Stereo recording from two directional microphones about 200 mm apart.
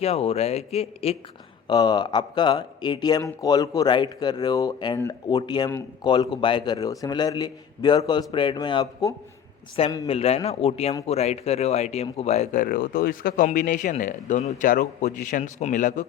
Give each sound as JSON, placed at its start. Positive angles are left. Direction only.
{"t": 0.0, "sound": "speech", "side_deg": 30}
{"t": 10.1, "sound": "speech", "side_deg": 30}